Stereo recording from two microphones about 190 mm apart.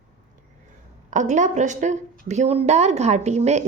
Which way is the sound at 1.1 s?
40° right (ahead or behind).